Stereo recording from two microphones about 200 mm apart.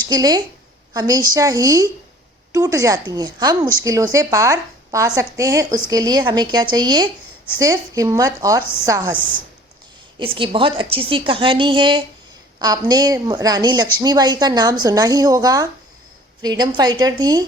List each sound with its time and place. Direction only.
0.1 s a woman's voice: 20° right (ahead or behind)
10.2 s a woman's voice: 25° right (ahead or behind)